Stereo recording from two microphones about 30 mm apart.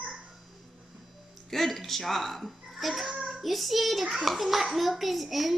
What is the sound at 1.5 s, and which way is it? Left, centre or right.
A woman's voice, centre.